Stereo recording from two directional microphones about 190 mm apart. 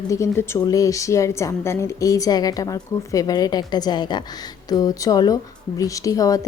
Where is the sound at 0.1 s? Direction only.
15° left (ahead or behind).